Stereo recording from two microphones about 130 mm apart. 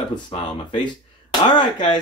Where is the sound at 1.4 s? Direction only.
35° left (ahead or behind).